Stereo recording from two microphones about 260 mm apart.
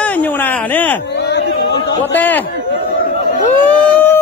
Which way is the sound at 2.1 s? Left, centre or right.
Centre.